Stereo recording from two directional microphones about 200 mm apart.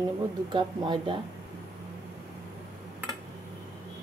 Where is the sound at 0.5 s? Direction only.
25° right (ahead or behind).